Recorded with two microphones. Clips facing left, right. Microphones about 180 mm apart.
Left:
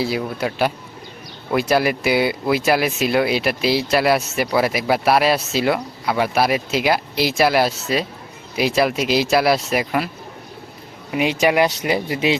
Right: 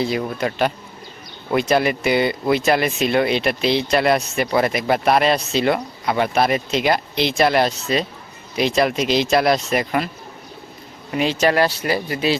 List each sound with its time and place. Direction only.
0.0 s speech: 5° left (ahead or behind)
11.1 s speech: 10° left (ahead or behind)